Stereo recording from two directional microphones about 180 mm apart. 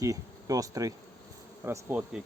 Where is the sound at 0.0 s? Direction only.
20° right (ahead or behind).